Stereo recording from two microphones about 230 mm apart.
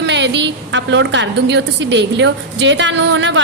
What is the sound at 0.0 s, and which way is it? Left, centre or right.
A woman's voice, right.